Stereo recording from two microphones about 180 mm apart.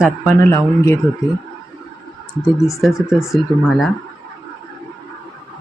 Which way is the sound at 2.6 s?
15° left (ahead or behind).